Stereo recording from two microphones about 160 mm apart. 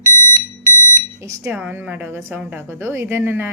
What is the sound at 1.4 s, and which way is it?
A woman's voice, 10° right (ahead or behind).